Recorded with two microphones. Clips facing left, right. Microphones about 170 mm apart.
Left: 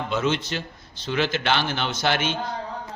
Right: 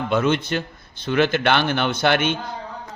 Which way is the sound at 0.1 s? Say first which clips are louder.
Right 5 dB; 55° right (ahead or behind).